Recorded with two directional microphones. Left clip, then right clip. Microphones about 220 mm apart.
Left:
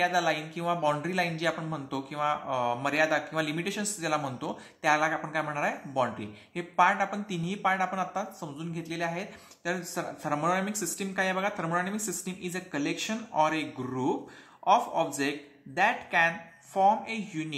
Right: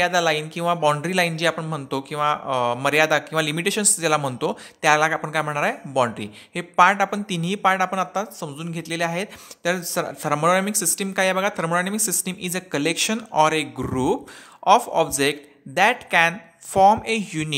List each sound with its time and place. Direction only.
0.0 s speech: 40° right (ahead or behind)